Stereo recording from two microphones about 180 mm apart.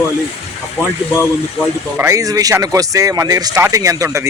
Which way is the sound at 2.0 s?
15° right (ahead or behind).